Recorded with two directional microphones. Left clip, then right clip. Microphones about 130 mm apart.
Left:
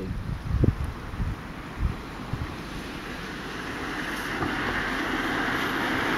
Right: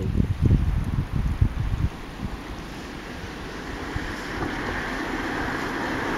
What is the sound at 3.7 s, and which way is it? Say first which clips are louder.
Vehicle: left 1 dB; 20° left (ahead or behind).